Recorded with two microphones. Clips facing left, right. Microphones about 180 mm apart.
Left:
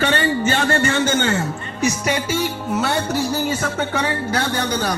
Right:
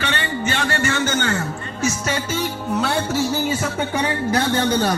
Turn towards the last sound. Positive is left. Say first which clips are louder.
# right 1 dB
turn(degrees=-15)  # may be behind; listen again after turning